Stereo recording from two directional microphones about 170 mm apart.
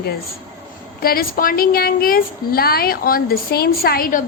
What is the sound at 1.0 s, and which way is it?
A woman's voice, 60° left (ahead or behind).